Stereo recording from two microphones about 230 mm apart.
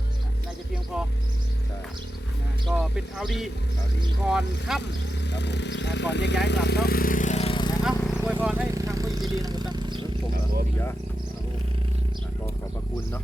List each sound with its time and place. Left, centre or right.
2.7 s speech: centre
5.3 s speech: left; by 7.8 s centre
7.9 s vehicle: centre
8.7 s a sound: centre